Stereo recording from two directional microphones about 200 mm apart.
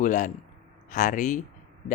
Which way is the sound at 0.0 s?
40° left (ahead or behind).